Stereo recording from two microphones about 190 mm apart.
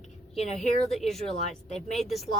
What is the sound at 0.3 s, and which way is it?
Speech, 35° left (ahead or behind).